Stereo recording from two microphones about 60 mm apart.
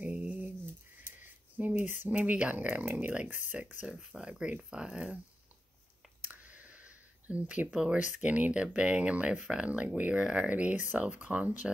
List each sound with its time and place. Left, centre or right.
0.0 s a sound: right
3.0 s speech: right
3.8 s speech: centre
6.2 s speech: right